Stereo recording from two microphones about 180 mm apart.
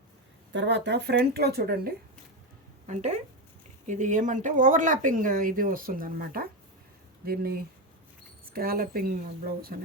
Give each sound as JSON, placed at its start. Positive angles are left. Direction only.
{"t": 0.5, "sound": "speech", "side_deg": -75}
{"t": 2.8, "sound": "speech", "side_deg": -40}